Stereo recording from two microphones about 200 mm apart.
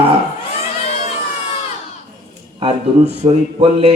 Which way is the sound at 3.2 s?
30° right (ahead or behind).